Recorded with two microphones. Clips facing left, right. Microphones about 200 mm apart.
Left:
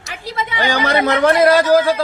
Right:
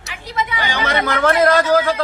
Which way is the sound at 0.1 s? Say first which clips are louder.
Even; 30° left (ahead or behind).